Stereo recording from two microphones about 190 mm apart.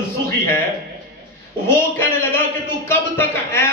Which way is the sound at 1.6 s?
15° left (ahead or behind).